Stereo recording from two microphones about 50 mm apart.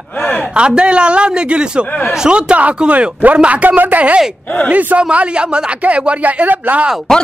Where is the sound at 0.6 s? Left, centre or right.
Right.